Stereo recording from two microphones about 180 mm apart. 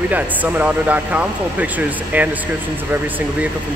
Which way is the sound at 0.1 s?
10° right (ahead or behind).